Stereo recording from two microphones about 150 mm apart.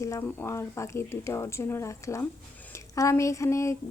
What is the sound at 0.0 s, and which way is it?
A woman's voice, 20° left (ahead or behind).